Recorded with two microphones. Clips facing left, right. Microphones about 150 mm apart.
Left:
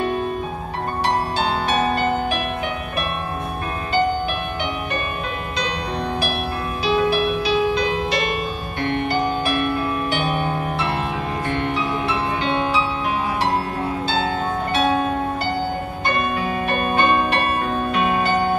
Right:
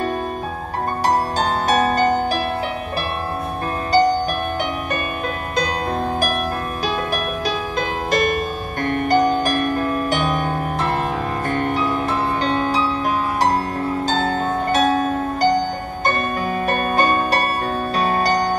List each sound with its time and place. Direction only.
1.0 s music: 40° right (ahead or behind)
3.9 s music: 40° right (ahead or behind)
6.9 s music: 45° right (ahead or behind)
14.0 s music: 40° right (ahead or behind)